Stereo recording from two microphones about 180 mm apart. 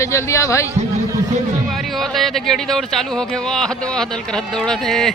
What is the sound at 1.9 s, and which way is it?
Speech, centre (ahead or behind).